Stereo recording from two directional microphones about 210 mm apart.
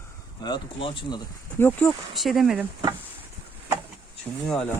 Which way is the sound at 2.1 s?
Centre (ahead or behind).